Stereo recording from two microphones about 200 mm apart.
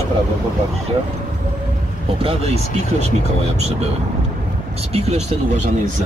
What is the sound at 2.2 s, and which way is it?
Speech, 30° right (ahead or behind).